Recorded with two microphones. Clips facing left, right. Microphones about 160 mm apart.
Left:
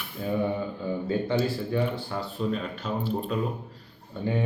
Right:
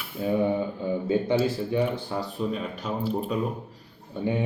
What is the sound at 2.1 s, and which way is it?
A man's voice, 15° right (ahead or behind).